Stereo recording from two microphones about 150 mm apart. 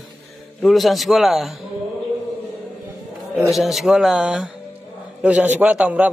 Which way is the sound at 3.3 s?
Centre (ahead or behind).